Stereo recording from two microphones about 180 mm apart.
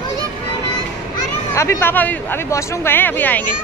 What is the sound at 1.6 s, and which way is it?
Speech, 15° left (ahead or behind).